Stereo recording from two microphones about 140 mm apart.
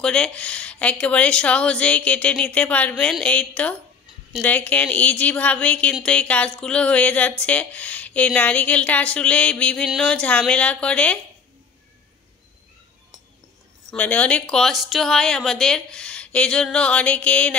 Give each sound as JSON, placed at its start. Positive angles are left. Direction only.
{"t": 0.0, "sound": "speech", "side_deg": 5}
{"t": 13.8, "sound": "speech", "side_deg": 10}